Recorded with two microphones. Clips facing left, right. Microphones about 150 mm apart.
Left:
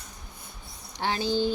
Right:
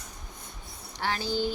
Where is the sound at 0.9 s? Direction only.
20° left (ahead or behind).